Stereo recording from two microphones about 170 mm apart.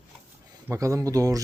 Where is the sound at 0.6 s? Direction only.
15° right (ahead or behind).